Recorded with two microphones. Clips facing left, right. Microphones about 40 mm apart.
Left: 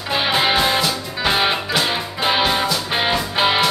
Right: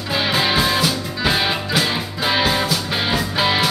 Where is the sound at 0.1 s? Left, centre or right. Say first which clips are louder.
Left 1 dB; centre.